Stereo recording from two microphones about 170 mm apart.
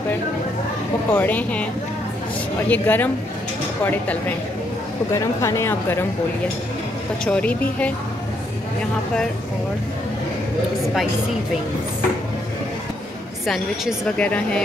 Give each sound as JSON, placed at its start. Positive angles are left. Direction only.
{"t": 1.1, "sound": "a woman's voice", "side_deg": 10}
{"t": 2.7, "sound": "a woman's voice", "side_deg": 10}
{"t": 5.1, "sound": "a woman's voice", "side_deg": 15}
{"t": 7.2, "sound": "a woman's voice", "side_deg": 5}
{"t": 13.5, "sound": "speech", "side_deg": 5}